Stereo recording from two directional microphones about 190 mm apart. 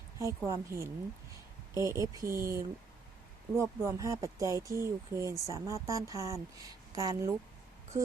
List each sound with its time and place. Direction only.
0.2 s speech: 15° right (ahead or behind)